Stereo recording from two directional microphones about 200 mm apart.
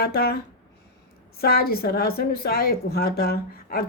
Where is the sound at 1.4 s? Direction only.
50° left (ahead or behind).